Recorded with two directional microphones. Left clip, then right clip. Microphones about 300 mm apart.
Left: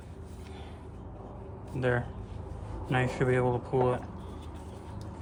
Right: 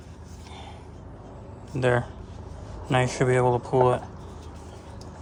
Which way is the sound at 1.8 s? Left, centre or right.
Centre.